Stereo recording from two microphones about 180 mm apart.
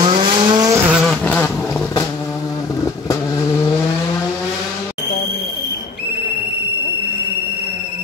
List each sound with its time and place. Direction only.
0.0 s vehicle: 30° right (ahead or behind)
0.8 s vehicle: centre (ahead or behind)